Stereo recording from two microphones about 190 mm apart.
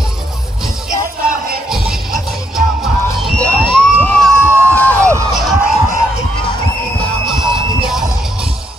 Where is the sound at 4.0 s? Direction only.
10° left (ahead or behind).